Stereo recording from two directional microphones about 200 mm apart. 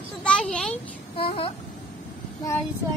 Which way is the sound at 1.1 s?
30° left (ahead or behind).